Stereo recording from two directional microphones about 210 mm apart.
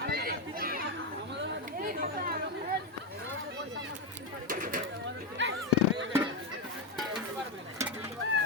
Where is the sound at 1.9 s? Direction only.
40° right (ahead or behind).